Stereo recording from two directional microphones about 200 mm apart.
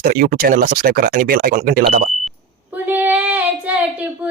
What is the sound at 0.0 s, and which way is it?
Speech, 45° right (ahead or behind).